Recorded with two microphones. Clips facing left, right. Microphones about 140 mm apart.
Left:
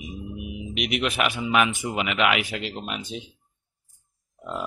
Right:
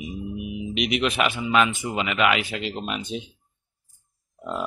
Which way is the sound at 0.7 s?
5° left (ahead or behind).